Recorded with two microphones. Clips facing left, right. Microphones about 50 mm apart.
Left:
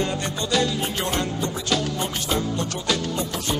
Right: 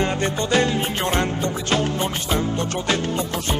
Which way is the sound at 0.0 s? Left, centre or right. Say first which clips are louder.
Right 4 dB; right.